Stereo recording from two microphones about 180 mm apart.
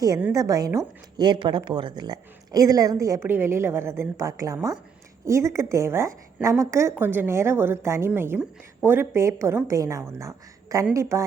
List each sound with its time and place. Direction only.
0.3 s a woman's voice: 20° right (ahead or behind)